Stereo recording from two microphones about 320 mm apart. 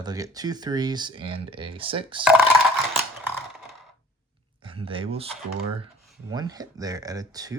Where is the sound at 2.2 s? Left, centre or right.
Centre.